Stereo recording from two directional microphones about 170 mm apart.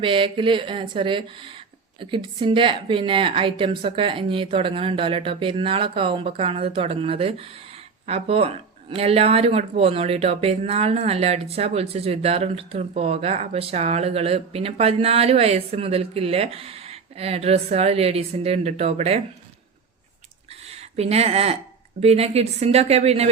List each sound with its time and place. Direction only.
0.0 s speech: 30° right (ahead or behind)
20.9 s speech: 35° right (ahead or behind)